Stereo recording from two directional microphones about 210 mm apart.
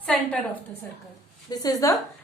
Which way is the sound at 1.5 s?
20° left (ahead or behind).